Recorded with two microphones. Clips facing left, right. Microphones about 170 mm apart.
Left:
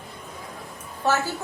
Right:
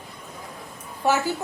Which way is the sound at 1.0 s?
15° right (ahead or behind).